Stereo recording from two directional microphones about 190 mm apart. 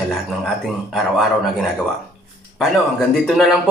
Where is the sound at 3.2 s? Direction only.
Centre (ahead or behind).